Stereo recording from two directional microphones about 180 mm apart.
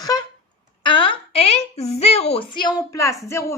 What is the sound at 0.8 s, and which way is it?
A woman's voice, 25° left (ahead or behind).